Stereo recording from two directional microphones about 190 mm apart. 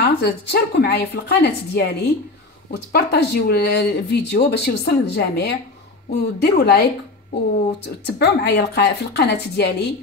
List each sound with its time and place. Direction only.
0.0 s speech: 60° left (ahead or behind)
8.2 s speech: 60° left (ahead or behind)